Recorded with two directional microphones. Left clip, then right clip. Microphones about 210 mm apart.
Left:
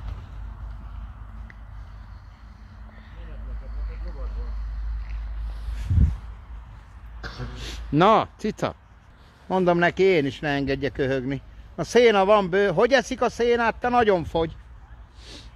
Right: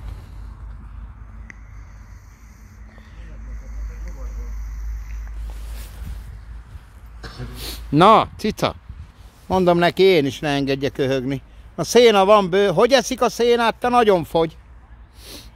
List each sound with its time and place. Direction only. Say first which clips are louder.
7.2 s speech: right 1 dB; 25° right (ahead or behind)